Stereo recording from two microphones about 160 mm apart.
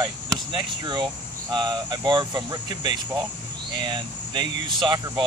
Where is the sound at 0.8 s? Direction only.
30° right (ahead or behind).